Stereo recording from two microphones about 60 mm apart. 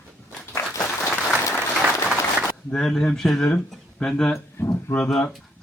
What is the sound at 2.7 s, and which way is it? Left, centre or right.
Speech, centre.